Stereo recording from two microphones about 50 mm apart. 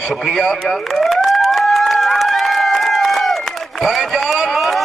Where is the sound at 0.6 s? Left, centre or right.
Centre.